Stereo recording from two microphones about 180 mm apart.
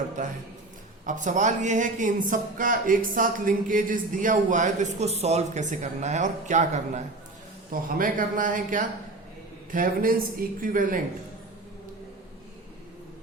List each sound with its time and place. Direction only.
0.2 s speech: 45° right (ahead or behind)